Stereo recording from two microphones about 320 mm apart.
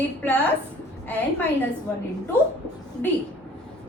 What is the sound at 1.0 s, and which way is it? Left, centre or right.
Speech, centre.